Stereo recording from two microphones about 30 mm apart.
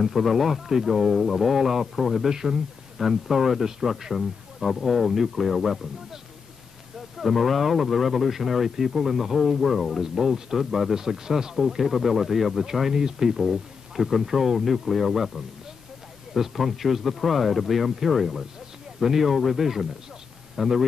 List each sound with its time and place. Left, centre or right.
0.0 s speech: centre
7.2 s speech: centre
11.0 s speech: centre
13.5 s speech: centre